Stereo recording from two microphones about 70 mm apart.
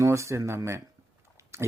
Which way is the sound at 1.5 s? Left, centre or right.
Right.